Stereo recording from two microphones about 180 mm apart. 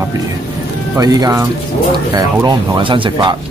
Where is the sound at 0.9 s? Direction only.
20° right (ahead or behind).